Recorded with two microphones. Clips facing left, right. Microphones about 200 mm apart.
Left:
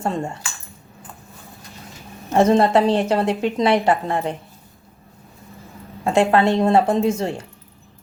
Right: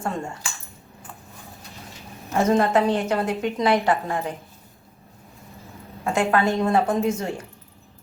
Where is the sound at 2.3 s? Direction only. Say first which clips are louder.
Left 4 dB; 30° left (ahead or behind).